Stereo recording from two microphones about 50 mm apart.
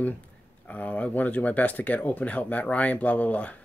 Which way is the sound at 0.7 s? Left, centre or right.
Left.